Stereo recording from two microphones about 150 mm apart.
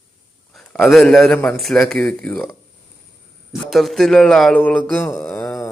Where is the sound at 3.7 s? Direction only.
Centre (ahead or behind).